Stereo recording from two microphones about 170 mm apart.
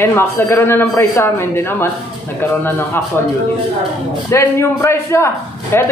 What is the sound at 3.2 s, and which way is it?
Speech, 15° left (ahead or behind).